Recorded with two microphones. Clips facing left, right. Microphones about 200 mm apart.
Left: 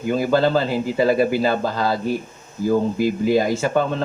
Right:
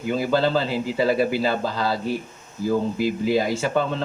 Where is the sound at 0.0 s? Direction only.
50° left (ahead or behind).